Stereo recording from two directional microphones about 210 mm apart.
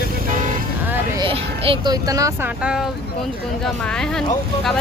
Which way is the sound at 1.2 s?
25° right (ahead or behind).